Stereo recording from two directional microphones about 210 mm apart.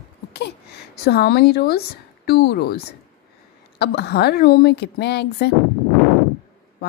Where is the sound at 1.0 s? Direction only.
50° left (ahead or behind).